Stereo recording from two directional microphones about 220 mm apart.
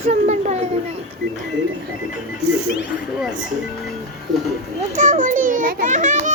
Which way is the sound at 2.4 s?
50° right (ahead or behind).